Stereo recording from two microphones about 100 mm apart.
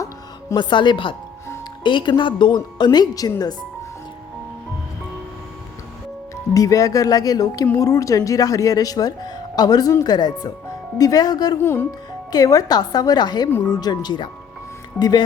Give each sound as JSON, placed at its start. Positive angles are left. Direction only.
{"t": 0.5, "sound": "speech", "side_deg": 50}
{"t": 6.5, "sound": "speech", "side_deg": 35}
{"t": 11.6, "sound": "speech", "side_deg": 20}
{"t": 12.3, "sound": "speech", "side_deg": 40}